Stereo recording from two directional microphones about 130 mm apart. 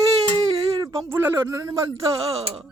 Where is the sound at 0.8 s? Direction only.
25° right (ahead or behind).